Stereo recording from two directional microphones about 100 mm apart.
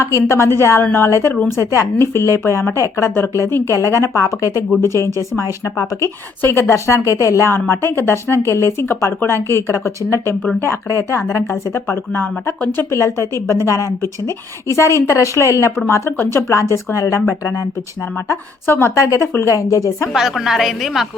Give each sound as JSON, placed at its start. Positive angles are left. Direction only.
{"t": 0.3, "sound": "a woman's voice", "side_deg": 25}
{"t": 20.1, "sound": "a woman's voice", "side_deg": -5}